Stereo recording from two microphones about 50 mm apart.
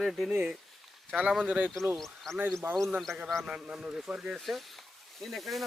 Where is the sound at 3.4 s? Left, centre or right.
Centre.